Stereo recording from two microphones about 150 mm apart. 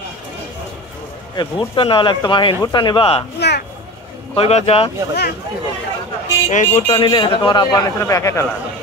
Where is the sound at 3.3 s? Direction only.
90° left.